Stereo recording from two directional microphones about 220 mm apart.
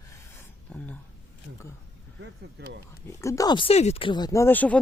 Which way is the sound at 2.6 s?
50° right (ahead or behind).